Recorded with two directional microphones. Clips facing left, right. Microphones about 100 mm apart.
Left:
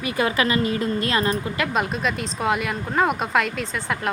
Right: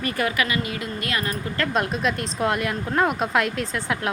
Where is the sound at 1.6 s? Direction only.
5° left (ahead or behind).